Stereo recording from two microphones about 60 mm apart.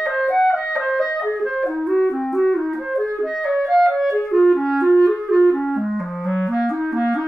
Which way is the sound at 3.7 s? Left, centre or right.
Centre.